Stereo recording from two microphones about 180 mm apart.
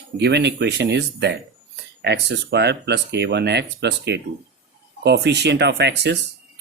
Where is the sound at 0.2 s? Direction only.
70° right (ahead or behind).